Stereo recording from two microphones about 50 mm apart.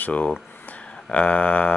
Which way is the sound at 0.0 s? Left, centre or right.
Left.